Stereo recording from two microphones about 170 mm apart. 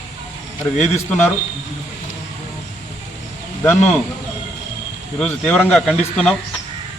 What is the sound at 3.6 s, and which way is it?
Speech, 15° left (ahead or behind).